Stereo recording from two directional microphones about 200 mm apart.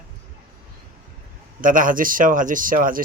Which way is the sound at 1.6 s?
45° right (ahead or behind).